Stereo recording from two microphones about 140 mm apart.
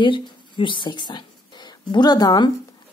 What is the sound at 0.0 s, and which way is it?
Speech, 35° left (ahead or behind).